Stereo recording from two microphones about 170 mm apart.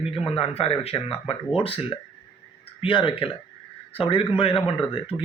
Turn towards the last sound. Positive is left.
turn(degrees=30)  # may be behind; listen again after turning